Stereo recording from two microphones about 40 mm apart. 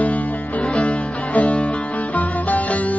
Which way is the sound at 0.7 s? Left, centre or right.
Left.